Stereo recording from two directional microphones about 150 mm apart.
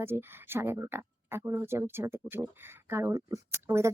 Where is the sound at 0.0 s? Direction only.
15° right (ahead or behind).